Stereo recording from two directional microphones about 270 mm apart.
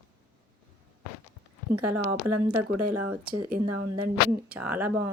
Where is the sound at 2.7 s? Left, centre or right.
Right.